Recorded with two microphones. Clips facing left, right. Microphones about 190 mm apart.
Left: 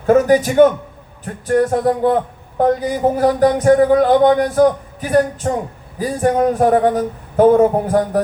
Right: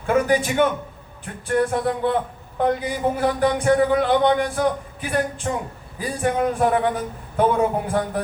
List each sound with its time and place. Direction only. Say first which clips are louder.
0.0 s speech: left 7 dB; 40° left (ahead or behind)